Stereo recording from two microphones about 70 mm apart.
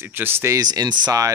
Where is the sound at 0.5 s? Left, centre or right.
Right.